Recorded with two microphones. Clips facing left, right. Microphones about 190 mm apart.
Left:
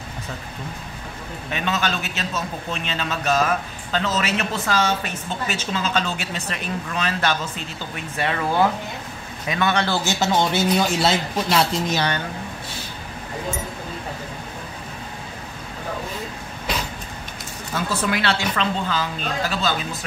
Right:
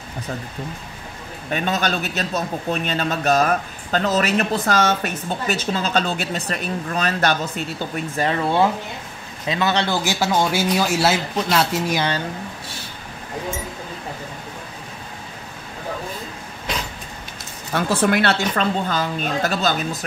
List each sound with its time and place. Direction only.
1.5 s a man's voice: 40° right (ahead or behind); by 9.9 s 25° right (ahead or behind)
10.0 s speech: 10° right (ahead or behind)
17.7 s a woman's voice: 55° right (ahead or behind)